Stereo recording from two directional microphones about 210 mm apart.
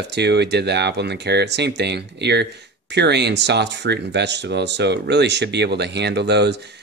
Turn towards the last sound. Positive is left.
turn(degrees=-55)  # may be behind; listen again after turning